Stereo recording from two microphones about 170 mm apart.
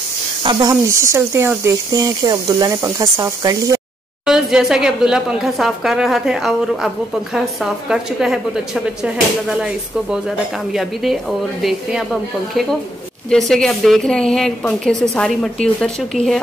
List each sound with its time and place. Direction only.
0.4 s speech: 25° right (ahead or behind)
4.3 s a woman's voice: 5° right (ahead or behind)
7.9 s a woman's voice: 5° right (ahead or behind)
10.7 s a woman's voice: centre (ahead or behind)
13.3 s a woman's voice: centre (ahead or behind)